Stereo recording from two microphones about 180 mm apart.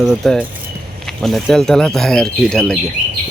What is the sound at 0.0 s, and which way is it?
Speech, centre (ahead or behind).